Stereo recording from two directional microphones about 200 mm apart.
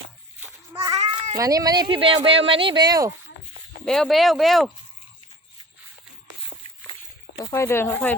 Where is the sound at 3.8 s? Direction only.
Centre (ahead or behind).